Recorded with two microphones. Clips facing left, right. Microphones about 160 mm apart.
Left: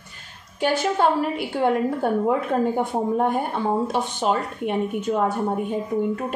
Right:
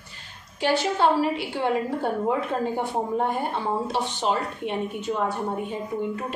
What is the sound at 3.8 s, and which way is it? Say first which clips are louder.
A woman's voice: left 3 dB; 50° left (ahead or behind).